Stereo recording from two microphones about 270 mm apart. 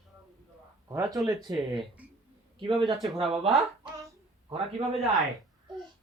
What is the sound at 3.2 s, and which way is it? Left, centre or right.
Speech, right.